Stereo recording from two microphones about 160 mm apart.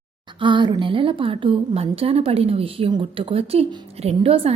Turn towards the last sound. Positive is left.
turn(degrees=-40)  # may be behind; listen again after turning